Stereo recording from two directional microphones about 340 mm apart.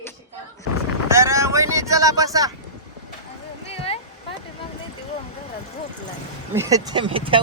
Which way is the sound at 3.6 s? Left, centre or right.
Centre.